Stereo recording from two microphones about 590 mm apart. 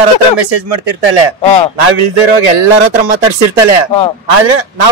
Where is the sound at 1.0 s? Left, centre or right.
Right.